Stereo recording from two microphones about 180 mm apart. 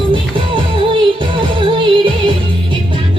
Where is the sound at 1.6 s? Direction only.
25° right (ahead or behind).